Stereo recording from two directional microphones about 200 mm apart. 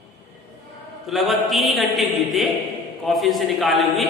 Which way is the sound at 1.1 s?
Centre (ahead or behind).